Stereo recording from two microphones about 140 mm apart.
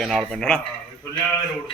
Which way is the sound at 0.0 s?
5° left (ahead or behind).